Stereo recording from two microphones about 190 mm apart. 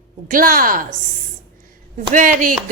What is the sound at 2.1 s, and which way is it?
Speech, 45° right (ahead or behind).